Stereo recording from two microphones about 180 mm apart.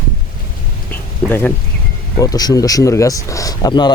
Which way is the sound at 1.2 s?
10° left (ahead or behind).